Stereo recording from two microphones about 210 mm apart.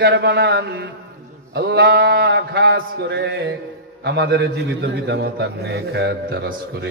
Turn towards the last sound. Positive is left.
turn(degrees=-50)  # may be behind; listen again after turning